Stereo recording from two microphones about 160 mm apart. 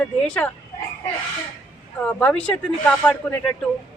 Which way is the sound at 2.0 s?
10° left (ahead or behind).